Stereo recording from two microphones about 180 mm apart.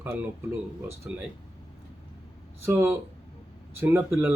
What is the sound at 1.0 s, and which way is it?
Speech, 10° right (ahead or behind).